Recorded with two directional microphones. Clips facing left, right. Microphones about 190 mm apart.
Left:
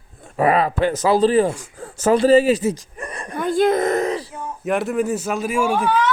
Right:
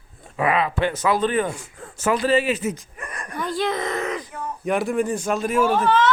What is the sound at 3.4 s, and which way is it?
Speech, 50° left (ahead or behind).